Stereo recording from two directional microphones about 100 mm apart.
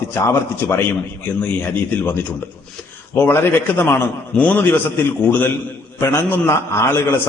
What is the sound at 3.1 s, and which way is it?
A man's voice, 25° left (ahead or behind).